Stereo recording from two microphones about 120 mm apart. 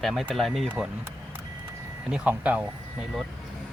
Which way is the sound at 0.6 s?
10° right (ahead or behind).